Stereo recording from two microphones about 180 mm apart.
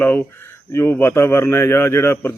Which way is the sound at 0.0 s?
10° left (ahead or behind).